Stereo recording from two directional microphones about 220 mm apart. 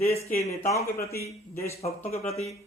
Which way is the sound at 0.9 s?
15° left (ahead or behind).